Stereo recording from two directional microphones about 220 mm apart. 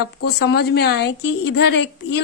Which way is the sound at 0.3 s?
50° left (ahead or behind).